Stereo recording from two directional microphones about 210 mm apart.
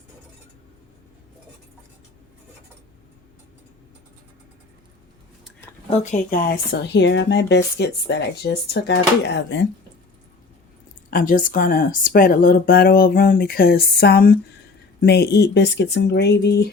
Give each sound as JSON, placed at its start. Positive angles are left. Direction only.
{"t": 5.9, "sound": "speech", "side_deg": 35}
{"t": 6.7, "sound": "speech", "side_deg": 55}
{"t": 11.1, "sound": "speech", "side_deg": 40}